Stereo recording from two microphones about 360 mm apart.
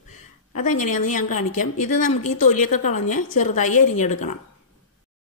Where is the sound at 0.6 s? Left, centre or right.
Left.